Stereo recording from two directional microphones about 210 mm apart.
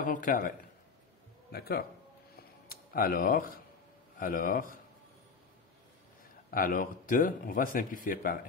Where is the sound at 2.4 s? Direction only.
45° left (ahead or behind).